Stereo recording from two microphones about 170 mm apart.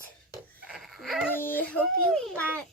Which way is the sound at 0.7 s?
Centre (ahead or behind).